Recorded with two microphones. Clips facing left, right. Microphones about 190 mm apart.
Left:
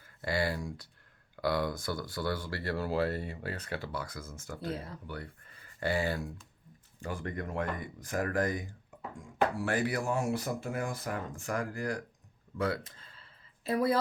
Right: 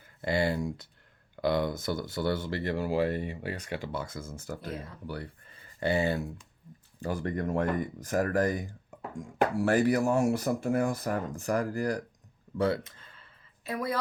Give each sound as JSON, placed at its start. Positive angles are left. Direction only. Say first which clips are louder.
{"t": 0.0, "sound": "speech", "louder": "right 4 dB", "side_deg": -25}
{"t": 7.0, "sound": "speech", "louder": "right 6 dB", "side_deg": -40}
{"t": 13.7, "sound": "a woman's voice", "louder": "left 4 dB", "side_deg": 35}